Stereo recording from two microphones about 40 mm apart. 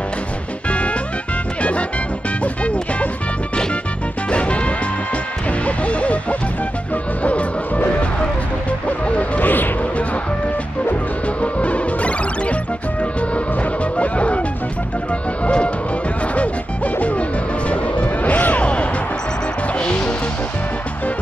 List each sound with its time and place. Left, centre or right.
0.7 s music: left
4.3 s music: left
7.2 s music: left
9.4 s music: left
11.4 s music: left
15.4 s music: left
16.3 s music: left